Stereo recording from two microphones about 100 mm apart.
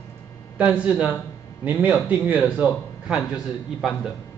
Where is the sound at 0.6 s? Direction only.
15° right (ahead or behind).